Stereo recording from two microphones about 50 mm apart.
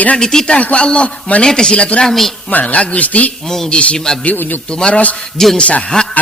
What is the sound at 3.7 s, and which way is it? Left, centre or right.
Speech, left.